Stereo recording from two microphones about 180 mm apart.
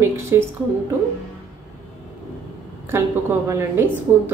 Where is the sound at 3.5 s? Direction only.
10° right (ahead or behind).